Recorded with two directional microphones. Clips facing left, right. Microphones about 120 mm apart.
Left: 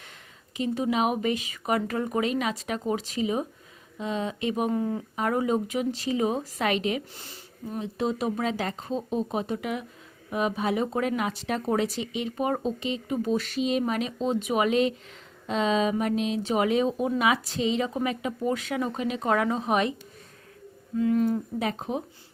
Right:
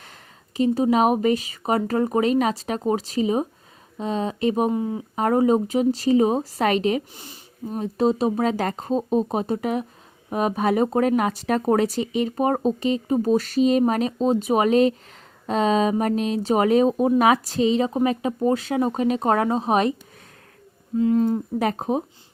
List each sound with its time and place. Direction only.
0.5 s speech: 35° right (ahead or behind)
4.7 s speech: 15° right (ahead or behind)
5.1 s speech: 40° right (ahead or behind)
7.2 s speech: 15° right (ahead or behind)
7.8 s speech: 35° right (ahead or behind)
20.9 s a sound: 30° right (ahead or behind)
21.6 s speech: 50° right (ahead or behind)